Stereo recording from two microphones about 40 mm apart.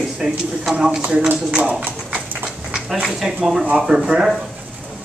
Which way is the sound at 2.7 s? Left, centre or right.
Centre.